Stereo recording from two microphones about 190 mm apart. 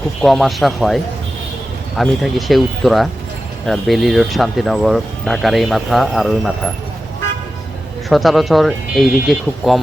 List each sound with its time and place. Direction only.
0.2 s speech: centre (ahead or behind)
8.1 s speech: centre (ahead or behind)